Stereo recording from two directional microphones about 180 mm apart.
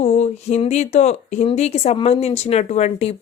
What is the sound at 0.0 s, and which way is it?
A woman's voice, 40° left (ahead or behind).